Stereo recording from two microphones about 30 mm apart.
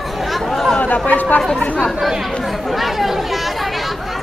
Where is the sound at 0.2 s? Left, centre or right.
Centre.